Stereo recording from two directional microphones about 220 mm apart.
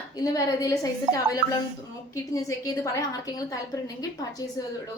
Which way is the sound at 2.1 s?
15° left (ahead or behind).